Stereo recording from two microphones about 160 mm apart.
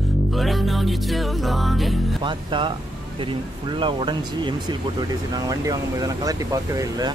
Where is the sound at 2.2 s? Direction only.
30° right (ahead or behind).